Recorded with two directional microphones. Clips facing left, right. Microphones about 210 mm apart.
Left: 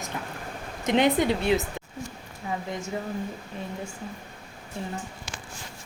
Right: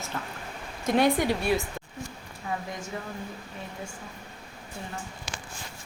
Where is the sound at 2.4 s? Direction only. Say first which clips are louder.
Left 1 dB; 20° left (ahead or behind).